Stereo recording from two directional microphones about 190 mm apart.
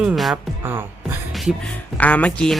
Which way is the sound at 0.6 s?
10° right (ahead or behind).